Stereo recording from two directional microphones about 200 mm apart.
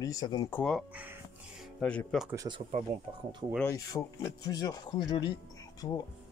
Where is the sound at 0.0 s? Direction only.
15° left (ahead or behind).